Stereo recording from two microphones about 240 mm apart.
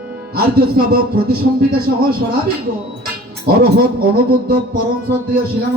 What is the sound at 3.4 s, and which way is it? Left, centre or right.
Speech, right.